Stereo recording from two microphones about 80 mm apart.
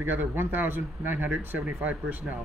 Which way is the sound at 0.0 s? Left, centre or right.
Right.